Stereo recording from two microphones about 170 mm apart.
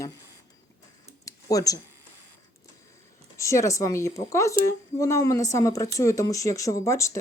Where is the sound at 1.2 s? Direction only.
20° left (ahead or behind).